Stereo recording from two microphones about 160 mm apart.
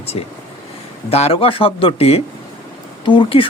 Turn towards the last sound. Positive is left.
turn(degrees=30)  # may be behind; listen again after turning